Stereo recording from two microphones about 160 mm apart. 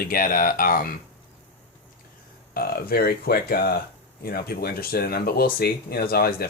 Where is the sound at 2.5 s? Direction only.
75° left (ahead or behind).